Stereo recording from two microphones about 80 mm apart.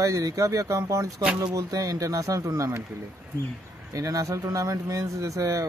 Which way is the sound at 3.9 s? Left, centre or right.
Right.